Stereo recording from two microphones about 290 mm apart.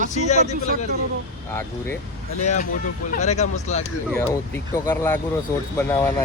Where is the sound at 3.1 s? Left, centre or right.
Left.